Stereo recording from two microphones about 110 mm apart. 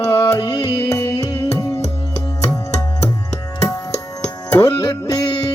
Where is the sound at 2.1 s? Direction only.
30° left (ahead or behind).